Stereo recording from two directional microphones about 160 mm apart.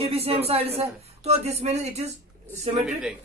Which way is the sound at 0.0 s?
40° right (ahead or behind).